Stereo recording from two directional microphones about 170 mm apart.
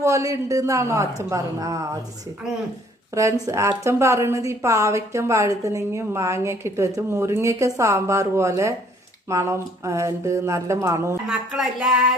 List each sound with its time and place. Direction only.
0.0 s speech: 20° right (ahead or behind)
3.2 s a woman's voice: 20° right (ahead or behind)
11.3 s speech: centre (ahead or behind)